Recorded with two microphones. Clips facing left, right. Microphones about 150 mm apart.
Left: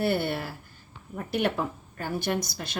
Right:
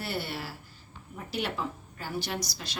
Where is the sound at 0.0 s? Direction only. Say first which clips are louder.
Left 8 dB; 55° left (ahead or behind).